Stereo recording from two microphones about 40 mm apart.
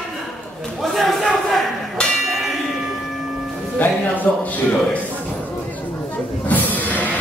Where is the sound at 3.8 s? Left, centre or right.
Left.